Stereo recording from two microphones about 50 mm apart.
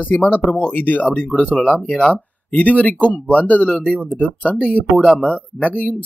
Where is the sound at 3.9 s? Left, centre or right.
Left.